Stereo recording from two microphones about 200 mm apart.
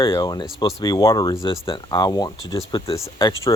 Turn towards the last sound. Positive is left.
turn(degrees=15)  # may be behind; listen again after turning